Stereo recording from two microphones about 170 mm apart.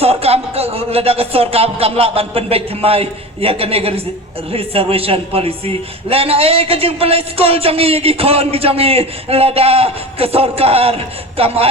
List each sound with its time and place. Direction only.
0.0 s a man's voice: 35° right (ahead or behind)